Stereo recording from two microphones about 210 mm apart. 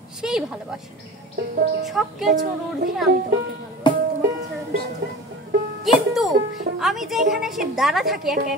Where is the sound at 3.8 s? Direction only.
20° left (ahead or behind).